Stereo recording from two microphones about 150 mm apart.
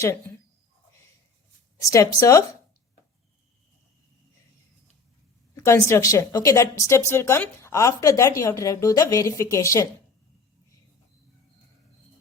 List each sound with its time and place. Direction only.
1.8 s a woman's voice: 20° left (ahead or behind)
5.5 s a woman's voice: 20° left (ahead or behind)